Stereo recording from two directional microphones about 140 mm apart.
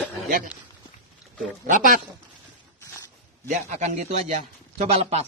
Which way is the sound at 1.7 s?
70° right (ahead or behind).